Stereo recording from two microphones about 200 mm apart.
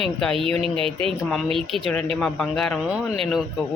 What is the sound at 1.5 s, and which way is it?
Speech, centre (ahead or behind).